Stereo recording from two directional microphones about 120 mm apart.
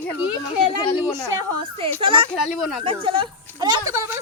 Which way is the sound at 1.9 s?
50° right (ahead or behind).